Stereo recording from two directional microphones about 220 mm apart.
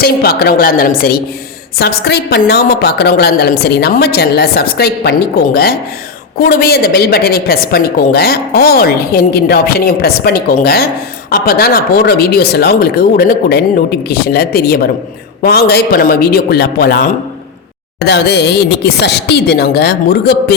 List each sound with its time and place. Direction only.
0.0 s a woman's voice: 45° left (ahead or behind)
6.4 s a woman's voice: 45° left (ahead or behind)